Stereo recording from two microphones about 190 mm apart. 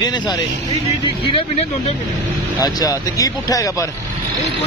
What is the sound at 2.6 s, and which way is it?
Speech, 20° left (ahead or behind).